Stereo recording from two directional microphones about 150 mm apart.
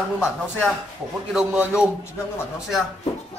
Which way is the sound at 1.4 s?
10° right (ahead or behind).